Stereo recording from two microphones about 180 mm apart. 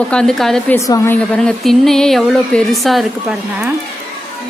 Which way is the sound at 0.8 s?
15° left (ahead or behind).